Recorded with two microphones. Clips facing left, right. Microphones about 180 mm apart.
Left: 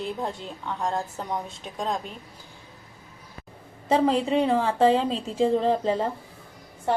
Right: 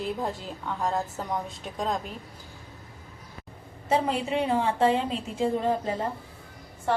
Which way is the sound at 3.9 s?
35° left (ahead or behind).